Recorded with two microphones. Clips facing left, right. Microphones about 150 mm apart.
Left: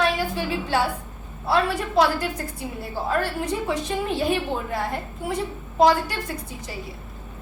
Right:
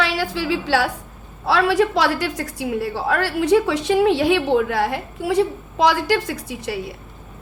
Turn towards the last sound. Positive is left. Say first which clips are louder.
# right 8 dB
turn(degrees=-75)  # may be behind; listen again after turning